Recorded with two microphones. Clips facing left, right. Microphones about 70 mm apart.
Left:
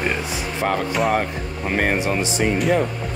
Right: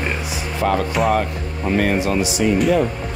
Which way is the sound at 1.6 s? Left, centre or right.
Left.